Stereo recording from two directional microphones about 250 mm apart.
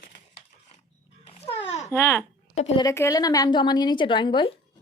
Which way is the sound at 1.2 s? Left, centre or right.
Left.